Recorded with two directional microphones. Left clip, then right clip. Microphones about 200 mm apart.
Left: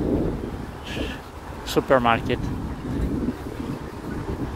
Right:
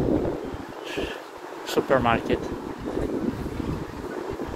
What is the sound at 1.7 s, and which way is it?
Speech, 30° left (ahead or behind).